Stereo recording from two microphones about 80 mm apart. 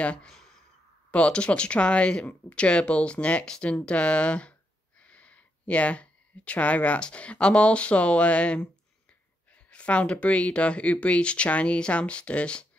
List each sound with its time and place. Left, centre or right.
0.0 s speech: centre